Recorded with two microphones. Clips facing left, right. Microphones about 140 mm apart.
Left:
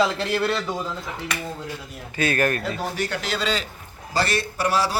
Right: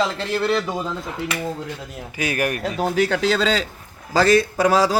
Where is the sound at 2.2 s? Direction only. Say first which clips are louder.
Left 1 dB; 15° right (ahead or behind).